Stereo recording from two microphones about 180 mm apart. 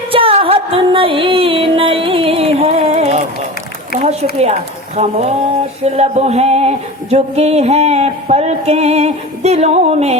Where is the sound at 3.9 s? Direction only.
40° right (ahead or behind).